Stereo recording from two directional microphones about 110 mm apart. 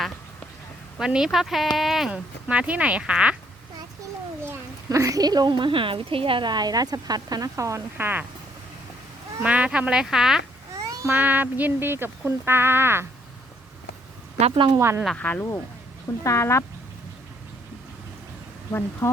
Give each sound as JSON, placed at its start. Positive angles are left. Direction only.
{"t": 0.9, "sound": "a woman's voice", "side_deg": -5}
{"t": 4.9, "sound": "a woman's voice", "side_deg": -30}
{"t": 9.4, "sound": "speech", "side_deg": -10}
{"t": 10.8, "sound": "babbling", "side_deg": -35}
{"t": 11.1, "sound": "speech", "side_deg": -15}
{"t": 14.4, "sound": "a woman's voice", "side_deg": -55}
{"t": 14.8, "sound": "speech", "side_deg": -25}
{"t": 15.0, "sound": "speech", "side_deg": 10}
{"t": 16.2, "sound": "speech", "side_deg": 25}
{"t": 18.7, "sound": "speech", "side_deg": 20}